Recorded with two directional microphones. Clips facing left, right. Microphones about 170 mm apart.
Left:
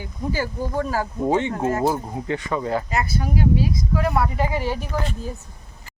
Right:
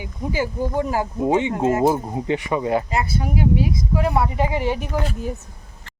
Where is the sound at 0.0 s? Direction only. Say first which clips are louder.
Right 2 dB; 15° right (ahead or behind).